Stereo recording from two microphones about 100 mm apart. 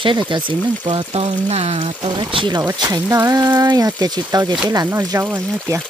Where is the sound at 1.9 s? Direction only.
50° right (ahead or behind).